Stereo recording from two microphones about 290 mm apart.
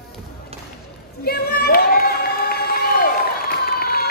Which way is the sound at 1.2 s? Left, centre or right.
Left.